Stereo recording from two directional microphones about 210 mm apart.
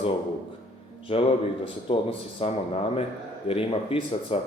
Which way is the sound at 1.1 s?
25° left (ahead or behind).